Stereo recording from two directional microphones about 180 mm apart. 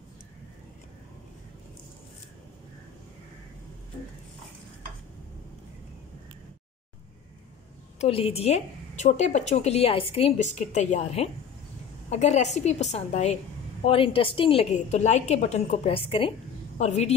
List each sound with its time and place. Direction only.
8.0 s a woman's voice: 35° left (ahead or behind)